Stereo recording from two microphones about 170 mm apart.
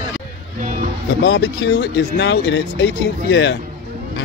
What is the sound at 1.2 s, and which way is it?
Speech, 90° left.